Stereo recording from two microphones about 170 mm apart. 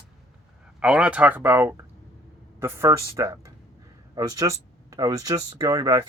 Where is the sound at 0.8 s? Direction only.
5° right (ahead or behind).